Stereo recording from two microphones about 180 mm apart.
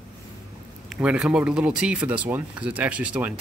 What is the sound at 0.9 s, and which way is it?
Speech, 5° right (ahead or behind).